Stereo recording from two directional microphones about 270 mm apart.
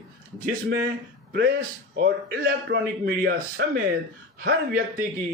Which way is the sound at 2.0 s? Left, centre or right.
Right.